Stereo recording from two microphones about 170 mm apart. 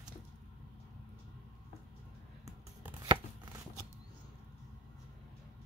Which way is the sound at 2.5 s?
25° right (ahead or behind).